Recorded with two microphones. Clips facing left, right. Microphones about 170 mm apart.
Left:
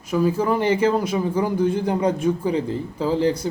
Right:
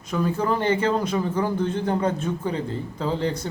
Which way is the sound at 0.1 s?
5° left (ahead or behind).